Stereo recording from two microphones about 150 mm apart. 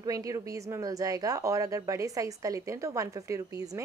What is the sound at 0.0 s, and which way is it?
A woman's voice, 20° right (ahead or behind).